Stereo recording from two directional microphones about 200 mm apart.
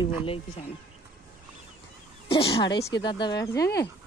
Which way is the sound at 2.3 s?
25° left (ahead or behind).